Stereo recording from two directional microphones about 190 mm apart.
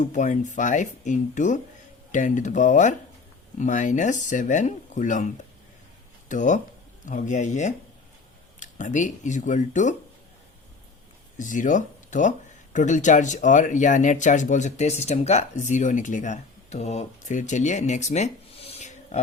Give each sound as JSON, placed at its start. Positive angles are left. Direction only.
{"t": 0.0, "sound": "speech", "side_deg": 40}
{"t": 11.3, "sound": "speech", "side_deg": 40}